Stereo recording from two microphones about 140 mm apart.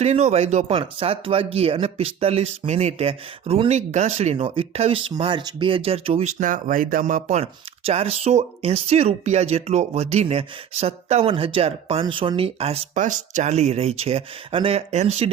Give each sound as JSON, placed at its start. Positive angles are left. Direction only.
{"t": 0.0, "sound": "speech", "side_deg": -50}
{"t": 6.4, "sound": "speech", "side_deg": -70}
{"t": 13.0, "sound": "speech", "side_deg": -65}